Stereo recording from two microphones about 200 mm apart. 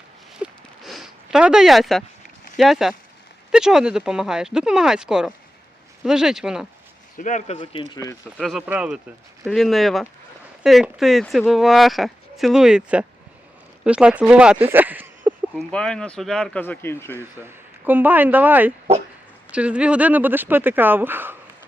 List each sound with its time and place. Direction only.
0.3 s a sound: 5° right (ahead or behind)
2.6 s speech: centre (ahead or behind)
7.2 s speech: 40° left (ahead or behind)
8.4 s speech: 5° right (ahead or behind)
15.5 s speech: 5° left (ahead or behind)
17.2 s speech: 10° right (ahead or behind)